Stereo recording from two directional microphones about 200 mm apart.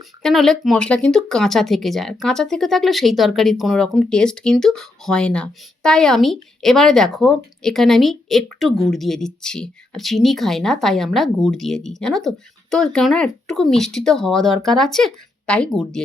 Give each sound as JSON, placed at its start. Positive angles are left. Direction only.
{"t": 0.2, "sound": "speech", "side_deg": 0}